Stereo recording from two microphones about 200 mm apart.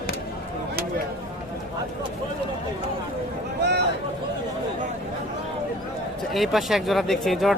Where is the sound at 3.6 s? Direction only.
55° right (ahead or behind).